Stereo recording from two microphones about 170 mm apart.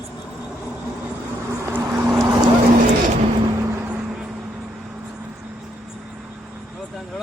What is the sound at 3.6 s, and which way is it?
Vehicle, 15° right (ahead or behind).